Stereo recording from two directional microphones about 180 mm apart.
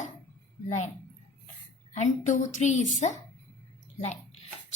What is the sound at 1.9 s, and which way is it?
A woman's voice, 40° left (ahead or behind).